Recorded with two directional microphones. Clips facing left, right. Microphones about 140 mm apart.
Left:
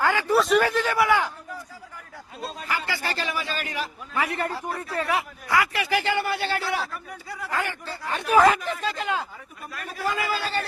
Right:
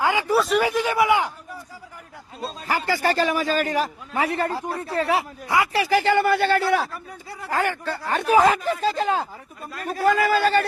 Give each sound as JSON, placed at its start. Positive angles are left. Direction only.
{"t": 0.0, "sound": "a sound", "side_deg": -15}
{"t": 0.3, "sound": "a sound", "side_deg": 0}
{"t": 0.6, "sound": "a man's voice", "side_deg": -15}
{"t": 2.6, "sound": "a man's voice", "side_deg": -40}
{"t": 4.1, "sound": "speech", "side_deg": -30}
{"t": 6.9, "sound": "speech", "side_deg": -30}
{"t": 7.6, "sound": "a man's voice", "side_deg": -55}
{"t": 8.5, "sound": "speech", "side_deg": -35}
{"t": 9.8, "sound": "a man's voice", "side_deg": -50}